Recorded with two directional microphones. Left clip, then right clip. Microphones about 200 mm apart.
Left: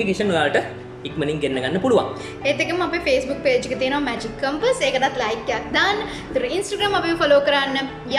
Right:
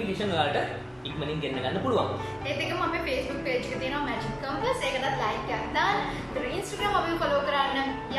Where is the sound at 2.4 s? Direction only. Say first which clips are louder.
Left 10 dB; 50° left (ahead or behind).